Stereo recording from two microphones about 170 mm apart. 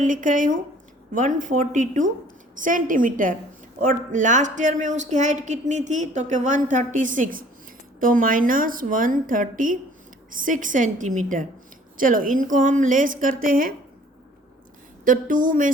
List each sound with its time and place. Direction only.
0.0 s a woman's voice: 50° right (ahead or behind)
15.0 s a woman's voice: 50° right (ahead or behind)